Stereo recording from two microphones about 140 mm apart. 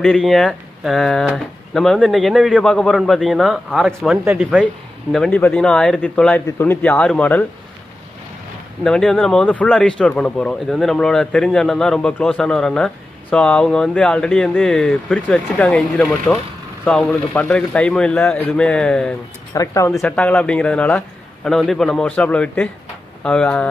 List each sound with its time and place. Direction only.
0.0 s speech: 5° left (ahead or behind)
5.1 s speech: 5° left (ahead or behind)
8.8 s speech: 5° left (ahead or behind)
19.5 s speech: 25° left (ahead or behind)
19.9 s speech: 5° left (ahead or behind)